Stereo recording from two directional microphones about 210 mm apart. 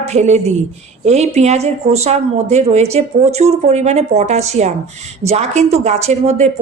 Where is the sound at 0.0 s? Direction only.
35° right (ahead or behind).